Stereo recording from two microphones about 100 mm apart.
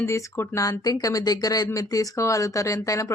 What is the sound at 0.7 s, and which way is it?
Speech, 45° left (ahead or behind).